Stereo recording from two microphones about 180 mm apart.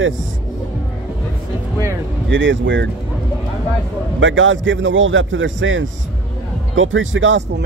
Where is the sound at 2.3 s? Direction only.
90° right.